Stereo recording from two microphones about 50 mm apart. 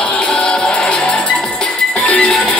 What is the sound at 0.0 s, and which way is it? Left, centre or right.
Music, left.